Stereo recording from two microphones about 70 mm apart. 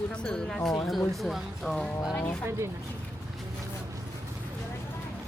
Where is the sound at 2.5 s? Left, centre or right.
Right.